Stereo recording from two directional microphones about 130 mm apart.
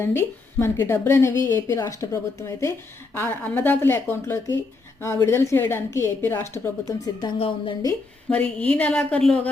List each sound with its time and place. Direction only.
0.0 s a woman's voice: 20° left (ahead or behind)
3.2 s a woman's voice: 15° left (ahead or behind)
7.3 s a woman's voice: 45° left (ahead or behind)
8.3 s a woman's voice: 10° left (ahead or behind)